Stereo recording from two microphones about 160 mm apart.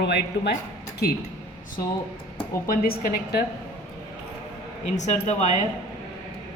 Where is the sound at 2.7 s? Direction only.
65° left (ahead or behind).